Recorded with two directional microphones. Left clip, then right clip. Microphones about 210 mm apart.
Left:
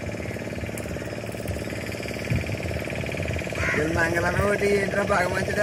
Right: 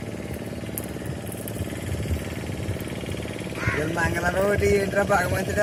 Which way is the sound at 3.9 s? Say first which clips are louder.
Left 1 dB; 45° right (ahead or behind).